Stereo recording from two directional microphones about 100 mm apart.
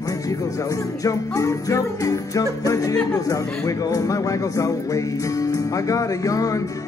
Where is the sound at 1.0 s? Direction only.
35° left (ahead or behind).